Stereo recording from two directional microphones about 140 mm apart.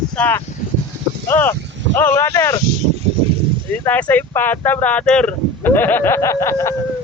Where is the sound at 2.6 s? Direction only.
55° right (ahead or behind); by 3.6 s 40° right (ahead or behind).